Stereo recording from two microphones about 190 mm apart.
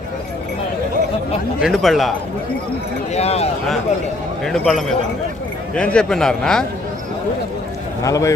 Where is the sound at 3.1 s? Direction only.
35° left (ahead or behind).